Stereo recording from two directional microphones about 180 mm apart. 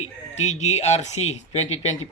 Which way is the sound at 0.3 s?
40° left (ahead or behind).